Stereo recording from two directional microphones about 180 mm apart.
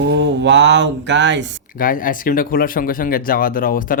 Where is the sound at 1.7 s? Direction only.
50° left (ahead or behind).